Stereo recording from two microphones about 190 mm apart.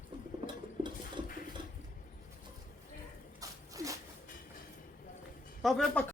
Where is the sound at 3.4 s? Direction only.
15° right (ahead or behind).